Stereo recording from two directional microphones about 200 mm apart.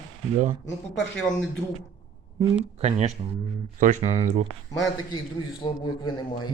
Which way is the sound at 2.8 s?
30° right (ahead or behind).